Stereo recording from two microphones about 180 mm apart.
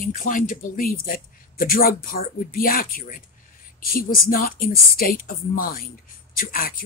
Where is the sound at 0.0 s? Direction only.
50° left (ahead or behind).